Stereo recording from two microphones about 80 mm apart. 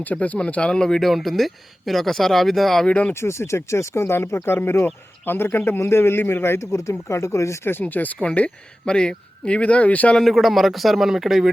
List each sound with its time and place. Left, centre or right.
0.0 s a man's voice: centre
2.8 s speech: centre
3.1 s a man's voice: left; by 10.2 s centre
10.2 s a man's voice: centre